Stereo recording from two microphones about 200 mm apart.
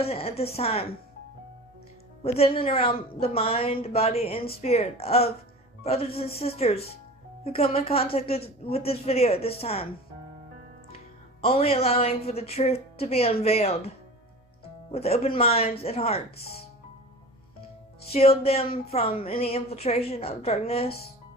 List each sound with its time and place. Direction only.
0.0 s speech: 30° left (ahead or behind)
2.2 s a woman's voice: 30° left (ahead or behind)
10.9 s speech: 30° left (ahead or behind)
14.9 s speech: 30° left (ahead or behind)
18.0 s speech: 30° left (ahead or behind)